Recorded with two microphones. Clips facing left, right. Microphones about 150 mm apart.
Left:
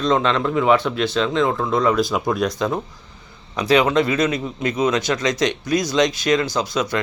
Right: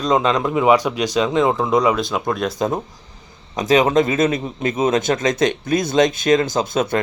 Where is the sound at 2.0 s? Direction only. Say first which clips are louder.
Left 1 dB; centre (ahead or behind).